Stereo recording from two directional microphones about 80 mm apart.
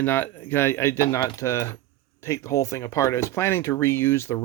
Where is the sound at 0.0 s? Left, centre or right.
Left.